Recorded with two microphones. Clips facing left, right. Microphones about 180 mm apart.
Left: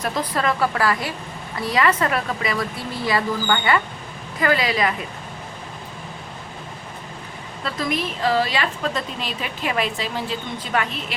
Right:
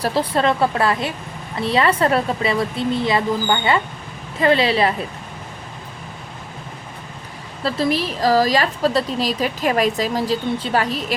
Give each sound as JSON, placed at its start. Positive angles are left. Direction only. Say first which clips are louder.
{"t": 0.0, "sound": "a woman's voice", "louder": "right 5 dB", "side_deg": -30}
{"t": 7.6, "sound": "a woman's voice", "louder": "right 5 dB", "side_deg": -30}